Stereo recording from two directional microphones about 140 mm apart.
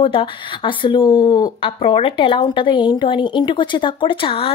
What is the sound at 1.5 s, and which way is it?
A woman's voice, 40° left (ahead or behind).